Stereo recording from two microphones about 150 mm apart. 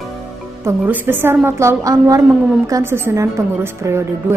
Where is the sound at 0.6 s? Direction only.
10° right (ahead or behind).